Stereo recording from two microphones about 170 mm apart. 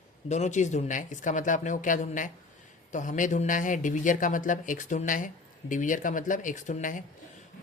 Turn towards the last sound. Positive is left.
turn(degrees=50)  # may be behind; listen again after turning